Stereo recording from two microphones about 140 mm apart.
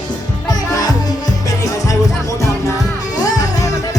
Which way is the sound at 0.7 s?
25° left (ahead or behind).